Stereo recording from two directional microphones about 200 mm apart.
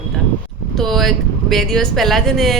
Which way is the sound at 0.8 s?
Centre (ahead or behind).